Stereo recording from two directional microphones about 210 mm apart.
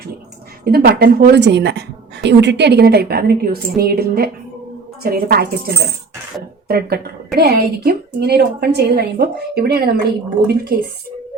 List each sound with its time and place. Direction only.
0.6 s a woman's voice: 50° right (ahead or behind)